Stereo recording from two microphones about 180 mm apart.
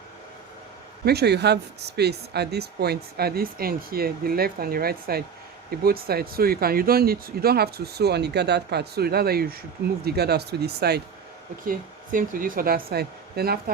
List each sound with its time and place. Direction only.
1.0 s speech: 65° right (ahead or behind)
11.6 s speech: 50° right (ahead or behind)